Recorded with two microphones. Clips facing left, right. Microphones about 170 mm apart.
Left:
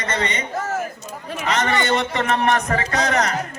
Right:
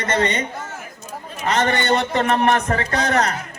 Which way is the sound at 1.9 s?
35° right (ahead or behind).